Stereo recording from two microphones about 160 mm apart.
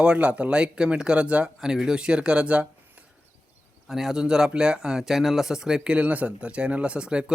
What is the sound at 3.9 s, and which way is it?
Speech, centre (ahead or behind).